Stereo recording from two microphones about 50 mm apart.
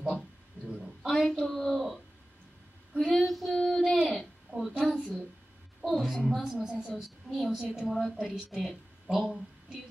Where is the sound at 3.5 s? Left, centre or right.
Centre.